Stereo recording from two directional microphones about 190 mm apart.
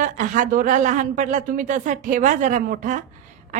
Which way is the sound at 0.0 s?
40° right (ahead or behind).